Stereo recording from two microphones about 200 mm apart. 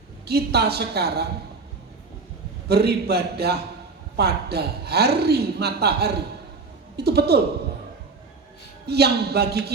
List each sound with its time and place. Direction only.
0.3 s speech: 55° right (ahead or behind)
2.6 s speech: 55° right (ahead or behind)
8.9 s speech: 55° right (ahead or behind)